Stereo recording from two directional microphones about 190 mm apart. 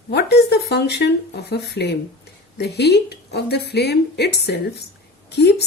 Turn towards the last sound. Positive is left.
turn(degrees=60)  # may be behind; listen again after turning